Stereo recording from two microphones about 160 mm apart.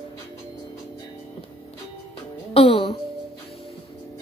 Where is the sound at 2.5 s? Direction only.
35° left (ahead or behind).